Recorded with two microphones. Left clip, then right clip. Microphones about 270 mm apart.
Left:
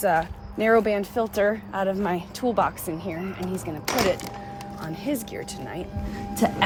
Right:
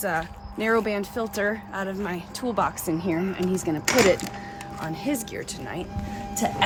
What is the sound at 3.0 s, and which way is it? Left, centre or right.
Speech, centre.